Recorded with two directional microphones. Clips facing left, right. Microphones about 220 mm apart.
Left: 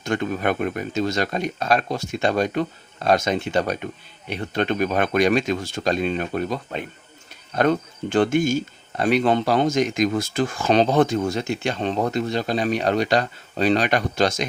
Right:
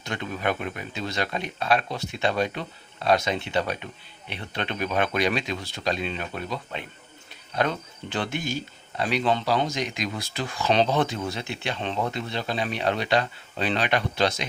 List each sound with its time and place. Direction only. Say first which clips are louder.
0.0 s speech: left 6 dB; 50° left (ahead or behind)